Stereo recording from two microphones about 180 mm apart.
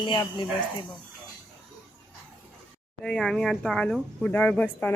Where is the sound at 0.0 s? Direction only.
25° left (ahead or behind).